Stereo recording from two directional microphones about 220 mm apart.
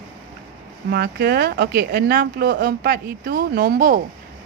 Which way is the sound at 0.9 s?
45° right (ahead or behind).